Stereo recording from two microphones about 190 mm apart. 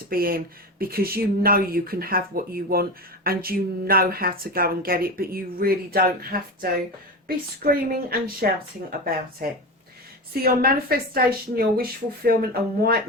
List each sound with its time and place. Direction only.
0.1 s speech: 50° right (ahead or behind)